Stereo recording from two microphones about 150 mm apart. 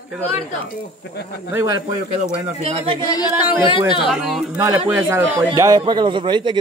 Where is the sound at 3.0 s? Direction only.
25° left (ahead or behind).